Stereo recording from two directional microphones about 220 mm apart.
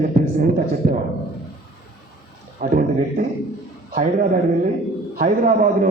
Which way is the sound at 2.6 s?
40° right (ahead or behind).